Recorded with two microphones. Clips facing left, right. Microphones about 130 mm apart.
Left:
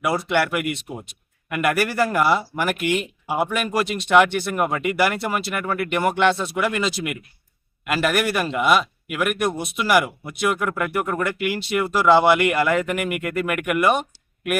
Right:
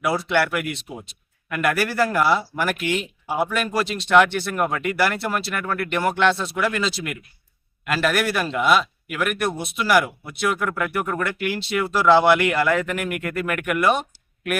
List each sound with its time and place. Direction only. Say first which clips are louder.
0.3 s speech: even; centre (ahead or behind)
0.9 s speech: left 2 dB; 50° left (ahead or behind)
1.5 s speech: left 1 dB; 5° left (ahead or behind)